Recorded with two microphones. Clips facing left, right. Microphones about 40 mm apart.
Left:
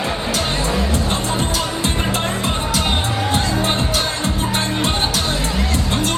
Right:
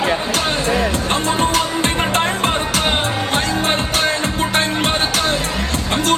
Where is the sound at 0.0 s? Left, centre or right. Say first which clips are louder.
Right 3 dB; right.